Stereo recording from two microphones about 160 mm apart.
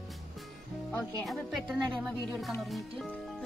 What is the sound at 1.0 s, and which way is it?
Speech, centre (ahead or behind).